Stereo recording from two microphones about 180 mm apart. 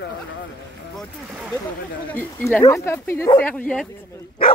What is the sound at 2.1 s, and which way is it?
Speech, 5° left (ahead or behind).